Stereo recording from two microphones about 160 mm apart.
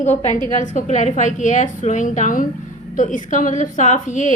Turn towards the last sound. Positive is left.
turn(degrees=50)  # may be behind; listen again after turning